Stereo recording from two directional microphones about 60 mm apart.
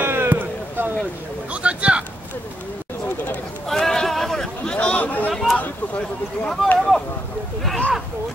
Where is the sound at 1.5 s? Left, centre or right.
Right.